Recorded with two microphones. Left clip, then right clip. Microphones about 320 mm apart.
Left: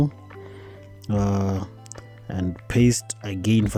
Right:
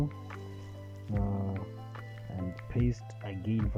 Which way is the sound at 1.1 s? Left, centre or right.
Left.